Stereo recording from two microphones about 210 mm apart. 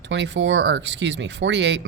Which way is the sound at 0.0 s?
55° right (ahead or behind).